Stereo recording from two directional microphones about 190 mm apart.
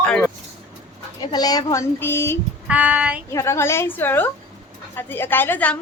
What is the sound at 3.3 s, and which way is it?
A child's voice, 15° left (ahead or behind).